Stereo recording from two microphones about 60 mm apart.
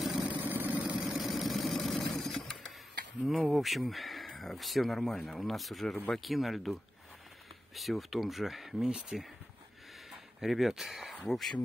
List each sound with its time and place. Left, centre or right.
0.0 s vehicle: centre
0.3 s vehicle: right
1.1 s vehicle: centre
2.2 s a sound: centre
3.3 s speech: centre
10.4 s speech: centre